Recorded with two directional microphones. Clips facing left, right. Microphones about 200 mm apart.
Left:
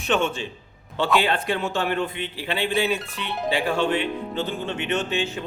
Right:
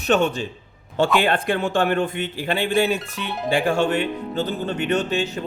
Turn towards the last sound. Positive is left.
turn(degrees=-40)  # may be behind; listen again after turning